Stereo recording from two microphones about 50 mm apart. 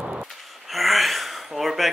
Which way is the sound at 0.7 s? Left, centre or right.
Centre.